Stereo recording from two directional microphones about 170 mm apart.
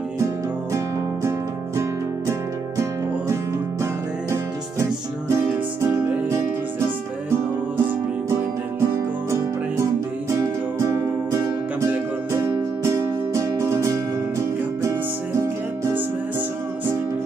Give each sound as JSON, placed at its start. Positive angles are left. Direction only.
{"t": 3.8, "sound": "music", "side_deg": -15}
{"t": 10.3, "sound": "music", "side_deg": -15}